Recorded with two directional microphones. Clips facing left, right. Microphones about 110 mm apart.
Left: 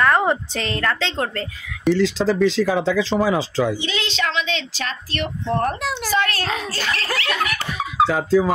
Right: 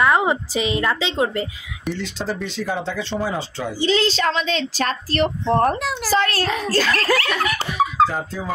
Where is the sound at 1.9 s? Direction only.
90° left.